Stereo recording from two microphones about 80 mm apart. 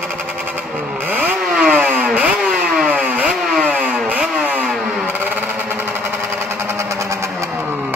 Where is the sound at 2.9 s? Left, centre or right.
Centre.